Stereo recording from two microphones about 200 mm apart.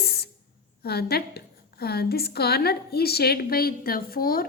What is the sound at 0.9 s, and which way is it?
A woman's voice, 50° left (ahead or behind).